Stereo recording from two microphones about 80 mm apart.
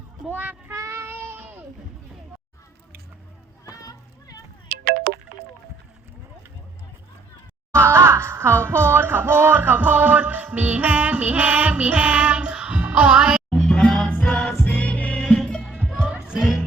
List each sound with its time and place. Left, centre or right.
0.3 s child singing: centre
0.7 s child singing: right
3.7 s a sound: left
7.7 s music: right; by 13.4 s centre
13.5 s music: centre
16.0 s music: centre